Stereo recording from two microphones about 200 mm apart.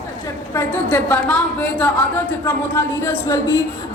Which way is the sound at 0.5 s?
10° left (ahead or behind).